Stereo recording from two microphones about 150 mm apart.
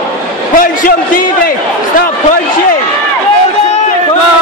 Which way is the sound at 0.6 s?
70° left (ahead or behind).